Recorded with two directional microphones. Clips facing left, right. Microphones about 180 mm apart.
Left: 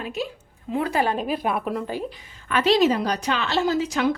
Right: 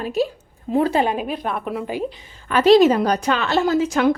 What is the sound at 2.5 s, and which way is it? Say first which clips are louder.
A woman's voice: right 6 dB; 45° right (ahead or behind).